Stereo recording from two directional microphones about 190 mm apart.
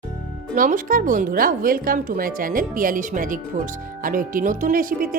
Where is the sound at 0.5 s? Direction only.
45° right (ahead or behind).